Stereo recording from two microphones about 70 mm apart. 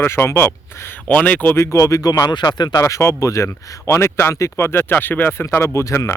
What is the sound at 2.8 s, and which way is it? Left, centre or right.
Speech, left.